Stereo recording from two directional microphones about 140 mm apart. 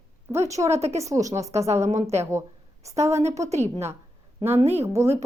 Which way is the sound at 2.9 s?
20° right (ahead or behind).